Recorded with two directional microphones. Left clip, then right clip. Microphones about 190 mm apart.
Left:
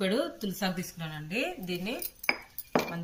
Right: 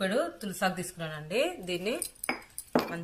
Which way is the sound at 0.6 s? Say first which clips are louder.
Right 5 dB; 40° right (ahead or behind).